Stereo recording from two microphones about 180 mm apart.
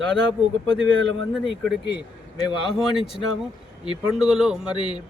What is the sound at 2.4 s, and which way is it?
Speech, 30° left (ahead or behind).